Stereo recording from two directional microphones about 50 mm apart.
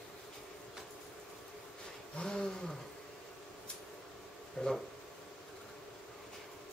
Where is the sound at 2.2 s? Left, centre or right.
Centre.